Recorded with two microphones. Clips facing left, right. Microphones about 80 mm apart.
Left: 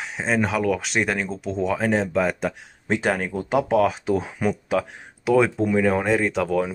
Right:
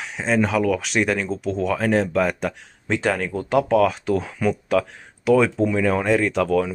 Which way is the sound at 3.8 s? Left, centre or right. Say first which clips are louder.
Right 1 dB; centre.